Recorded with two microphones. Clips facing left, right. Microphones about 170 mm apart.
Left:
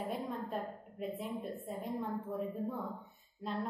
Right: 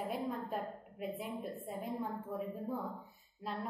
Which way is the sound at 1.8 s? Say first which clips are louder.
Left 1 dB; centre (ahead or behind).